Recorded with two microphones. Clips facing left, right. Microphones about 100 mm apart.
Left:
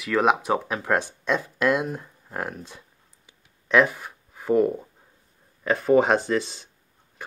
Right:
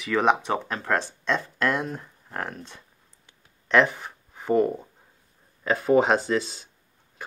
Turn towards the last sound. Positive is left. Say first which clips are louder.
# left 1 dB
turn(degrees=0)  # may be behind; listen again after turning